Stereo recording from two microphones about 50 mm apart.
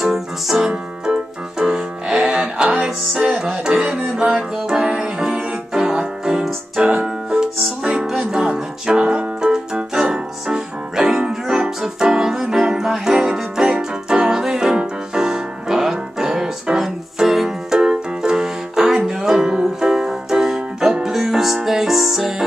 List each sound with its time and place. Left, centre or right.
0.0 s music: centre